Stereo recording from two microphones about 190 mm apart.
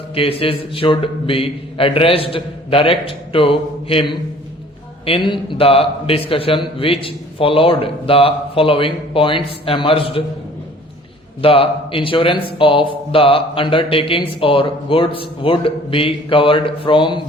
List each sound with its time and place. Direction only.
0.1 s speech: 30° left (ahead or behind)
11.4 s speech: 30° left (ahead or behind)